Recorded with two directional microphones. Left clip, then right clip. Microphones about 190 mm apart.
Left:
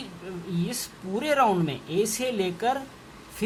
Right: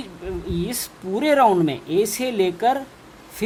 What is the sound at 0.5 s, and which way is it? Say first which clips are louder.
A woman's voice: right 5 dB; 35° right (ahead or behind).